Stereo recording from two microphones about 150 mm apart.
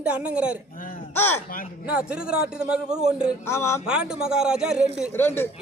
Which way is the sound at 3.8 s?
5° right (ahead or behind).